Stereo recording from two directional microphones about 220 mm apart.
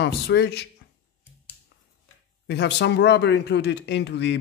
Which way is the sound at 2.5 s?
50° left (ahead or behind).